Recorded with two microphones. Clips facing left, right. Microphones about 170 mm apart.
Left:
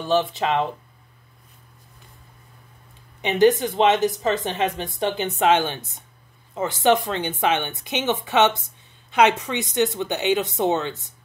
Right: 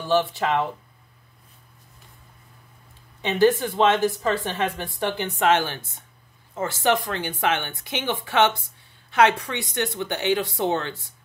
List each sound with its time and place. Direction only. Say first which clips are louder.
0.0 s a woman's voice: left 1 dB; 20° left (ahead or behind)
3.2 s a woman's voice: left 2 dB; 15° left (ahead or behind)